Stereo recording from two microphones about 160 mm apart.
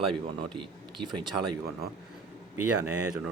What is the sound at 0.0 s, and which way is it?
A man's voice, 35° right (ahead or behind).